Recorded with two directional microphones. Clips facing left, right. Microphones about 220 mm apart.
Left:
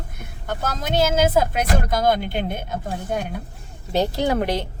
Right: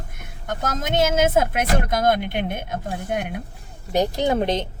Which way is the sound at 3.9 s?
15° right (ahead or behind).